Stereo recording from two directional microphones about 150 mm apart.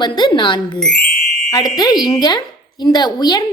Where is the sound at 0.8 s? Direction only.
5° left (ahead or behind).